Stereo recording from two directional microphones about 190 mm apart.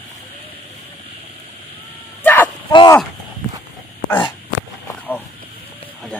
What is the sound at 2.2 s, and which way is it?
Bow-wow, 10° left (ahead or behind).